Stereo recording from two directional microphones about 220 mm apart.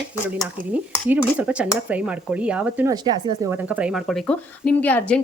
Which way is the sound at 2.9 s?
20° right (ahead or behind).